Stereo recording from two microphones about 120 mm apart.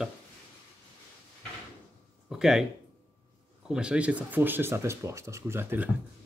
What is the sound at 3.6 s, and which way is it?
Speech, 5° right (ahead or behind).